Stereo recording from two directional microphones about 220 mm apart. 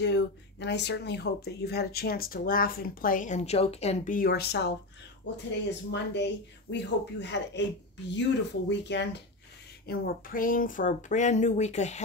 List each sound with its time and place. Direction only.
0.0 s speech: 50° left (ahead or behind)
5.9 s speech: 55° left (ahead or behind)
9.8 s speech: 40° left (ahead or behind)